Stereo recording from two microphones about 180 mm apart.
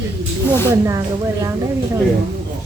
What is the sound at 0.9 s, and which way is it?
Speech, 20° right (ahead or behind).